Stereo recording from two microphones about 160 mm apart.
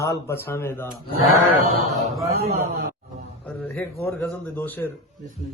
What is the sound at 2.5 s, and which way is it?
Speech, 65° right (ahead or behind).